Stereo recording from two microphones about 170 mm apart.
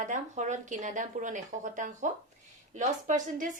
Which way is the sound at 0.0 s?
45° right (ahead or behind).